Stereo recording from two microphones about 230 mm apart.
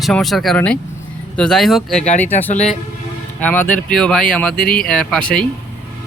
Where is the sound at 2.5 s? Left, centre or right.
Left.